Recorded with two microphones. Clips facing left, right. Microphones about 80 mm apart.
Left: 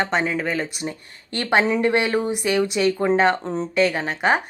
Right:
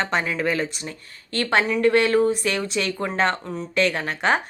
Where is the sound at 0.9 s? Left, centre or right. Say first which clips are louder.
Left 4 dB; centre.